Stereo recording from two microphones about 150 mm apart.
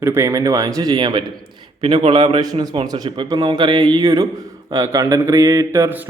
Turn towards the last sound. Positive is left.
turn(degrees=-15)  # may be behind; listen again after turning